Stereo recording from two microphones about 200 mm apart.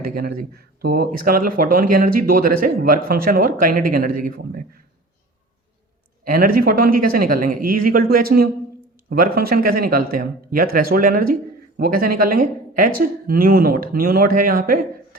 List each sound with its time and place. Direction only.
0.0 s speech: 50° right (ahead or behind)
6.2 s speech: 45° right (ahead or behind)